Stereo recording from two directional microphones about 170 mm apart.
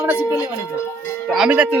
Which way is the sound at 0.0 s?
15° right (ahead or behind).